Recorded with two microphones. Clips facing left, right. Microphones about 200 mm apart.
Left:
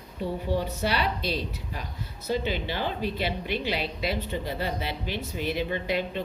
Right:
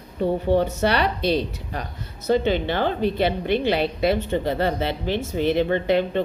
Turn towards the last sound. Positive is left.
turn(degrees=-60)  # may be behind; listen again after turning